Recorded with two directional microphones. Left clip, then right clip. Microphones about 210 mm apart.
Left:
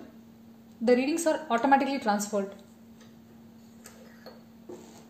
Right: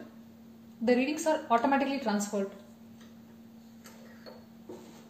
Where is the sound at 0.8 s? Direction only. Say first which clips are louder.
Left 3 dB; 45° left (ahead or behind).